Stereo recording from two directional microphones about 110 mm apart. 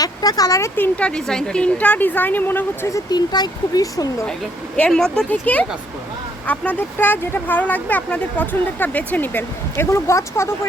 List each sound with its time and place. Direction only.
0.0 s speech: 35° left (ahead or behind)
0.8 s speech: 10° left (ahead or behind)
2.9 s speech: 40° left (ahead or behind)
4.8 s speech: 5° left (ahead or behind); by 10.5 s 25° left (ahead or behind)